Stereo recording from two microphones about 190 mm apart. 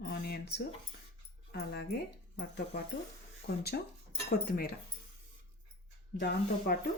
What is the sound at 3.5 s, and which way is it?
Speech, 55° left (ahead or behind).